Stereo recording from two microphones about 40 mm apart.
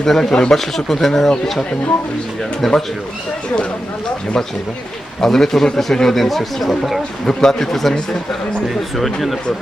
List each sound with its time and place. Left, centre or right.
0.0 s speech: centre
2.6 s speech: centre
5.2 s speech: centre